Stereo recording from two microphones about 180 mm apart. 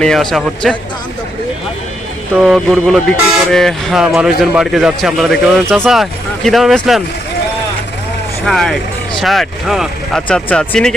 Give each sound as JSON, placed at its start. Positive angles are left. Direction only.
{"t": 0.0, "sound": "speech", "side_deg": 5}
{"t": 2.3, "sound": "speech", "side_deg": 0}
{"t": 8.4, "sound": "speech", "side_deg": 0}